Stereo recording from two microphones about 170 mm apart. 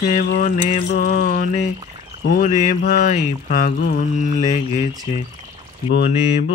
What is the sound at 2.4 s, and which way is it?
Mantra, 55° left (ahead or behind).